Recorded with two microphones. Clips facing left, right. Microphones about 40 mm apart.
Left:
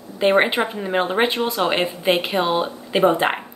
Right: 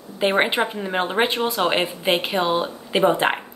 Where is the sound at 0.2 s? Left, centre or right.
Centre.